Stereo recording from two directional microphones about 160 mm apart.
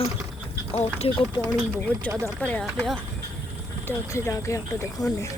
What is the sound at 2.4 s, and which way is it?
Speech, 10° left (ahead or behind).